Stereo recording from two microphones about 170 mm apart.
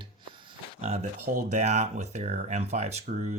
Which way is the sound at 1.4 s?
40° right (ahead or behind).